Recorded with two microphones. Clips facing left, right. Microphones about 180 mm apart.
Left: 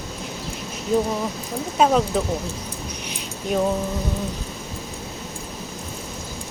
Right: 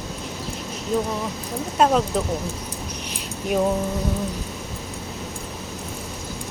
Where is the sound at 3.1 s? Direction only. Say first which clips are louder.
Right 1 dB; 5° right (ahead or behind).